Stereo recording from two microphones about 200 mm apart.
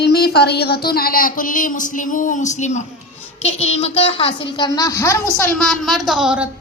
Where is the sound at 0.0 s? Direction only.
55° left (ahead or behind); by 5.5 s 15° left (ahead or behind).